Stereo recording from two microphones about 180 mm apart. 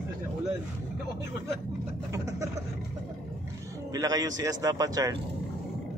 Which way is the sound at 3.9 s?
20° right (ahead or behind).